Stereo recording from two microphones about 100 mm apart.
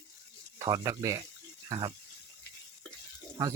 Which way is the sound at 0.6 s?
35° right (ahead or behind).